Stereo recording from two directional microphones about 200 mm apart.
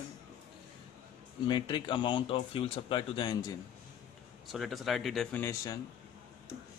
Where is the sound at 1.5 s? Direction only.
25° left (ahead or behind).